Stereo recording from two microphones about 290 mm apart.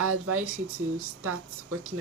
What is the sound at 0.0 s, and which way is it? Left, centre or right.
Speech, right.